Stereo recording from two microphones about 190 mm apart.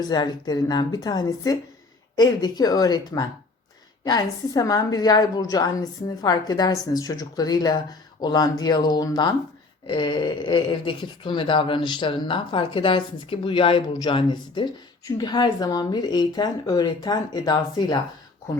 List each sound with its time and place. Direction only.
0.0 s speech: 20° left (ahead or behind)